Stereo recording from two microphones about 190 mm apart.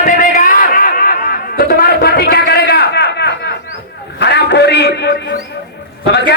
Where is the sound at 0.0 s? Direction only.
45° left (ahead or behind).